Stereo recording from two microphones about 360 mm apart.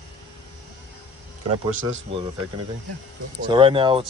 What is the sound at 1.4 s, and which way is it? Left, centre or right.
Speech, right.